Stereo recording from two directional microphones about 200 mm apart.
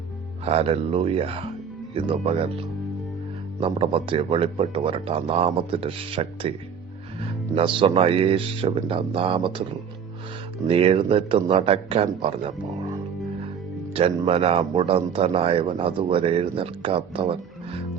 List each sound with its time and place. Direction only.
0.4 s speech: 30° right (ahead or behind)
7.5 s speech: 25° right (ahead or behind)
10.7 s speech: 30° right (ahead or behind)
13.9 s speech: 30° right (ahead or behind)